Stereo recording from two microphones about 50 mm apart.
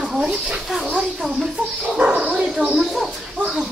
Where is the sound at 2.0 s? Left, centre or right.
Right.